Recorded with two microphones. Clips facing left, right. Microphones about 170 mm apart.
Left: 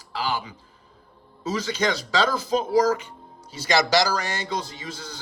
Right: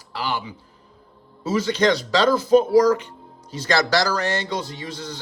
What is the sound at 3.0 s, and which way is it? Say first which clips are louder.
Music: right 1 dB; 5° left (ahead or behind).